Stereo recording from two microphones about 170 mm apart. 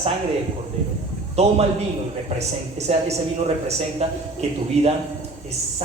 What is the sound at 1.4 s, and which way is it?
Speech, 40° right (ahead or behind).